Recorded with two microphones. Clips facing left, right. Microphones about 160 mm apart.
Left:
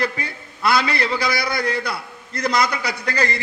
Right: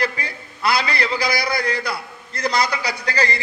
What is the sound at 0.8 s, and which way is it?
A man's voice, 50° left (ahead or behind).